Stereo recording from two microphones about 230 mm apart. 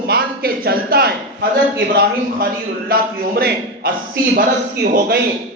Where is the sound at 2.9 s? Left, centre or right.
Right.